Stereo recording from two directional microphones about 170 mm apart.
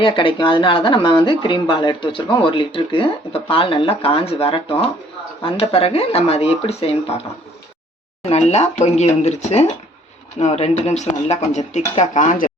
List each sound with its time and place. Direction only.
0.0 s speech: 30° left (ahead or behind)
8.2 s speech: 40° left (ahead or behind)